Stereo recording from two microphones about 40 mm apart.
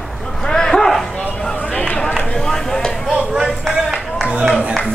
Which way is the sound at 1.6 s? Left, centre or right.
Left.